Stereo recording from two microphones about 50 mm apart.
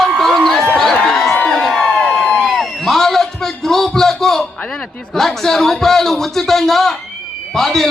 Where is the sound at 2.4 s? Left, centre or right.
Centre.